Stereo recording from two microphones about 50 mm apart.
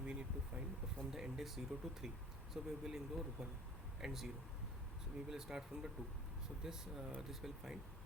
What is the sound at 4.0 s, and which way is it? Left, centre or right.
Speech, centre.